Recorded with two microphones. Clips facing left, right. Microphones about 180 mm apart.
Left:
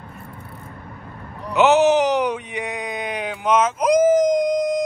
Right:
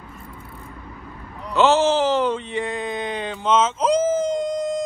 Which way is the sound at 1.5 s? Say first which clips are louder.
Left 2 dB; 15° left (ahead or behind).